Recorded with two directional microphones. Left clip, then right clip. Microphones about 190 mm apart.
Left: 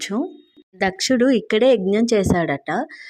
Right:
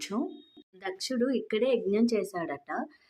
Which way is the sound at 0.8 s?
45° left (ahead or behind).